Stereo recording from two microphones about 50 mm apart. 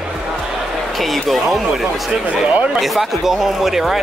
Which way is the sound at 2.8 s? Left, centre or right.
Centre.